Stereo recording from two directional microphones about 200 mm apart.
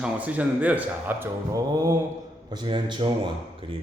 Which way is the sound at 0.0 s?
5° right (ahead or behind).